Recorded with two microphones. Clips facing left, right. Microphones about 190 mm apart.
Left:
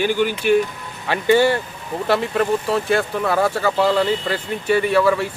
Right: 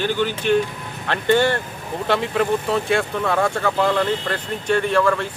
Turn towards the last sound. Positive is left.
turn(degrees=5)  # may be behind; listen again after turning